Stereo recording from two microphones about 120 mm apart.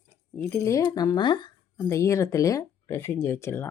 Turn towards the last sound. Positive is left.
turn(degrees=20)  # may be behind; listen again after turning